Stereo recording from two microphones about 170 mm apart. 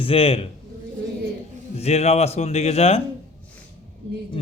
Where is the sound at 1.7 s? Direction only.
40° left (ahead or behind).